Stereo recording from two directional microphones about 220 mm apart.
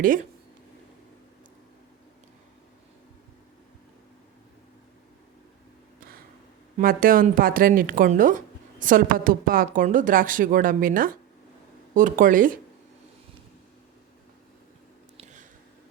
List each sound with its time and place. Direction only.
0.0 s speech: 35° right (ahead or behind)
6.7 s speech: 40° right (ahead or behind)
15.2 s a sound: 35° right (ahead or behind)